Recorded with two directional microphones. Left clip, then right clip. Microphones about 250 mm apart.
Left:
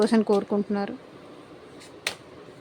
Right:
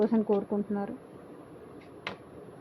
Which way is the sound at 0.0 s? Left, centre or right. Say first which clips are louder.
Left 5 dB; left.